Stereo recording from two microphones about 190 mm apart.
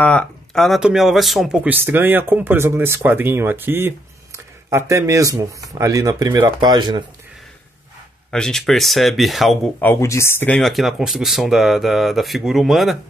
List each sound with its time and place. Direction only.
0.0 s speech: 5° left (ahead or behind); by 7.0 s 20° right (ahead or behind)
8.3 s speech: 5° left (ahead or behind)
9.8 s speech: 15° left (ahead or behind); by 12.9 s centre (ahead or behind)